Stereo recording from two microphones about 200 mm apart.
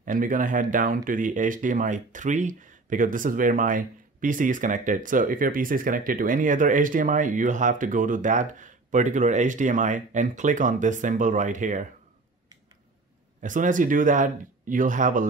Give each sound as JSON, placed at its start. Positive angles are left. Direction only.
{"t": 0.0, "sound": "speech", "side_deg": -40}
{"t": 13.4, "sound": "speech", "side_deg": -40}